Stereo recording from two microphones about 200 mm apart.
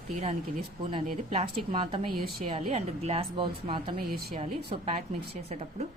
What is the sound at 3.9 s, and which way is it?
Speech, 50° right (ahead or behind).